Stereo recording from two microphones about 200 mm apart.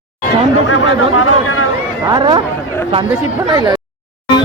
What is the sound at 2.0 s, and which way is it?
Speech, 20° right (ahead or behind).